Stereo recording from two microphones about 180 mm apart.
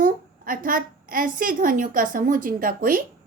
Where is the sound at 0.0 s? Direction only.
50° right (ahead or behind).